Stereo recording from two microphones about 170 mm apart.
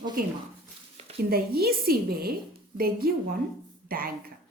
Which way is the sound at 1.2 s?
65° right (ahead or behind).